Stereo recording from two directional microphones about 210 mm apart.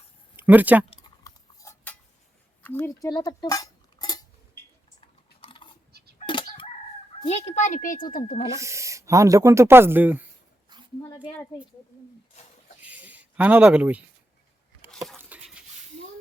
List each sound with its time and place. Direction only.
0.3 s speech: 10° right (ahead or behind)
1.2 s cutlery: 15° left (ahead or behind)
2.6 s dishes: 10° left (ahead or behind)
5.4 s a sound: 25° left (ahead or behind)
6.1 s crowing: 25° left (ahead or behind)
7.3 s a child's voice: 30° left (ahead or behind)
8.4 s speech: 15° right (ahead or behind)
10.7 s a sound: 20° right (ahead or behind)
12.8 s a sound: 5° right (ahead or behind)